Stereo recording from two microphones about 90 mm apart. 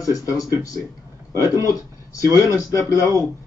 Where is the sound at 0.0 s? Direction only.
40° left (ahead or behind).